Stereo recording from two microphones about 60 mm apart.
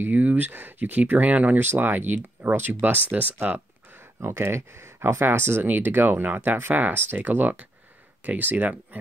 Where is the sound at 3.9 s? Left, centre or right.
Right.